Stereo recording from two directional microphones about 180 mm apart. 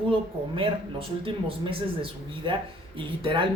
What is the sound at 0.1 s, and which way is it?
Speech, 30° right (ahead or behind).